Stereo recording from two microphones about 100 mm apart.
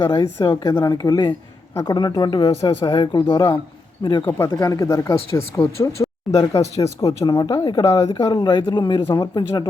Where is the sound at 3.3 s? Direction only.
30° left (ahead or behind).